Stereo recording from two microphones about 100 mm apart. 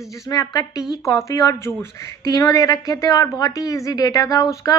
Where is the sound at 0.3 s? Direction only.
40° left (ahead or behind).